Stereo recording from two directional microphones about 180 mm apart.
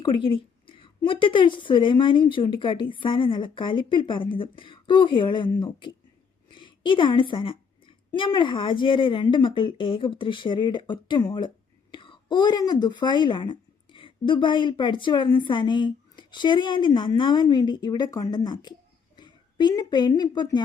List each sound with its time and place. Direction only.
0.0 s a woman's voice: 30° left (ahead or behind)